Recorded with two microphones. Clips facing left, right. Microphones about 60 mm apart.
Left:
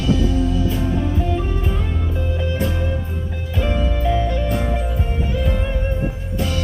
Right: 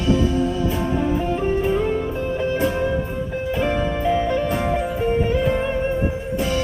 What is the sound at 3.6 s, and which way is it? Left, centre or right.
Music, right.